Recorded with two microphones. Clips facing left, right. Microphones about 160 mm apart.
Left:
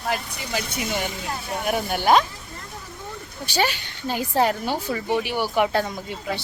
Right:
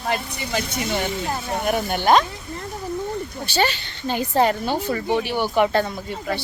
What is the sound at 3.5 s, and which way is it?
Speech, 10° left (ahead or behind).